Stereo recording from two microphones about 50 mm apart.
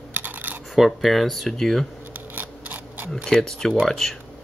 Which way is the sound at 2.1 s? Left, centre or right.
Right.